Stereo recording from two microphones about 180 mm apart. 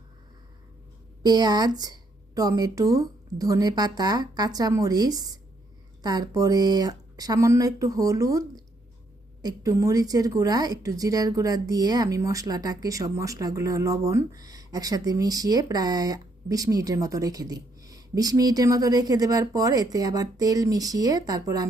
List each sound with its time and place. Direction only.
1.2 s a woman's voice: 20° right (ahead or behind)